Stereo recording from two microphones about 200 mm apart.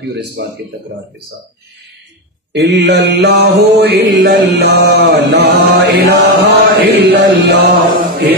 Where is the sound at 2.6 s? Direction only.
60° right (ahead or behind).